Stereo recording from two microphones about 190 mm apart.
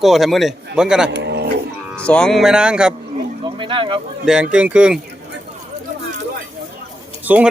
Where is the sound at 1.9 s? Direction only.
5° left (ahead or behind).